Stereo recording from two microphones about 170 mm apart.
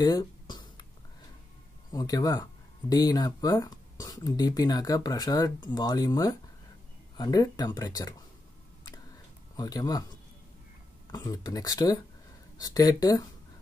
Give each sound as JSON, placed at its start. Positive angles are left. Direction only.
{"t": 0.0, "sound": "a sound", "side_deg": 25}
{"t": 1.9, "sound": "speech", "side_deg": 20}
{"t": 9.6, "sound": "speech", "side_deg": 20}